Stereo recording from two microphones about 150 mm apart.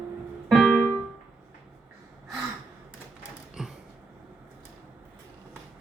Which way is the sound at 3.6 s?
Centre (ahead or behind).